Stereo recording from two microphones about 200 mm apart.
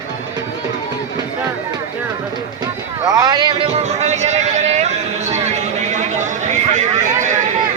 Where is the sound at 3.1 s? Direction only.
20° right (ahead or behind).